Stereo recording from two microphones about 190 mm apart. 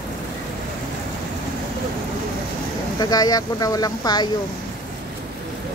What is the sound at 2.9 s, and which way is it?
Speech, 20° left (ahead or behind).